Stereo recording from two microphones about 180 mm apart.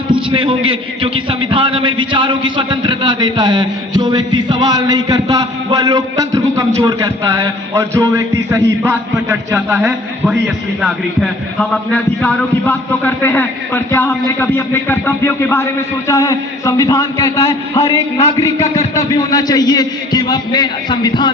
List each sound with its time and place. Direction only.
0.1 s a man's voice: 30° right (ahead or behind); by 21.2 s 25° left (ahead or behind)